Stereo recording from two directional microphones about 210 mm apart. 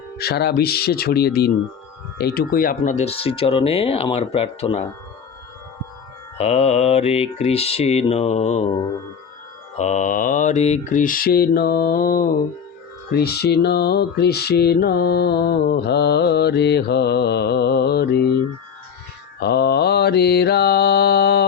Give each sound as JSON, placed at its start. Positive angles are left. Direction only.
{"t": 0.2, "sound": "mantra", "side_deg": 50}
{"t": 2.1, "sound": "speech", "side_deg": 50}
{"t": 6.3, "sound": "speech", "side_deg": 30}
{"t": 9.7, "sound": "mantra", "side_deg": 35}
{"t": 19.4, "sound": "mantra", "side_deg": 50}